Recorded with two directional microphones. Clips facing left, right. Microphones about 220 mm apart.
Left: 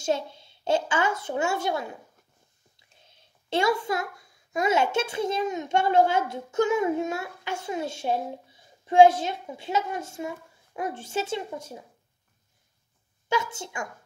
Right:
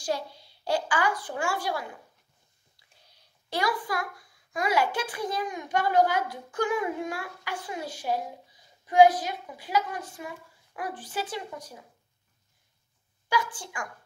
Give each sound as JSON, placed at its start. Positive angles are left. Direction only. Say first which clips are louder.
{"t": 0.0, "sound": "a woman's voice", "louder": "left 4 dB", "side_deg": 25}
{"t": 13.3, "sound": "a woman's voice", "louder": "left 2 dB", "side_deg": 25}